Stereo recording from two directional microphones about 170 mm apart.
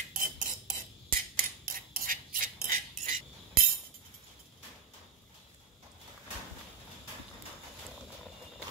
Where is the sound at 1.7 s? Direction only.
55° right (ahead or behind).